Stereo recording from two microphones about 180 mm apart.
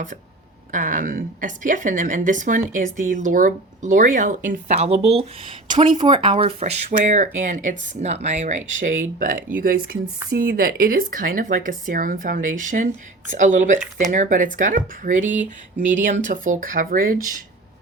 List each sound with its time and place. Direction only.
0.7 s a woman's voice: 45° right (ahead or behind)